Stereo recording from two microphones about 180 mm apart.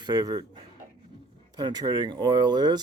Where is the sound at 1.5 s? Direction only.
20° right (ahead or behind).